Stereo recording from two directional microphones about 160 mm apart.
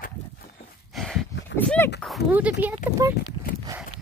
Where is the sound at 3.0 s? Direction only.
20° right (ahead or behind).